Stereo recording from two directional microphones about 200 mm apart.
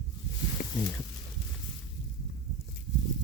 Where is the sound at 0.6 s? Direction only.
50° left (ahead or behind).